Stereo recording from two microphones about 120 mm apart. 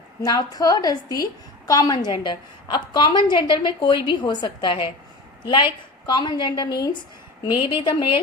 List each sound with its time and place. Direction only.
0.2 s a woman's voice: 30° left (ahead or behind)
6.1 s a woman's voice: 40° left (ahead or behind)
7.7 s speech: 50° left (ahead or behind)